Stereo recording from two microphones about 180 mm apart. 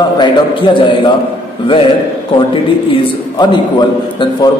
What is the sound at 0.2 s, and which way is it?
Speech, 25° left (ahead or behind).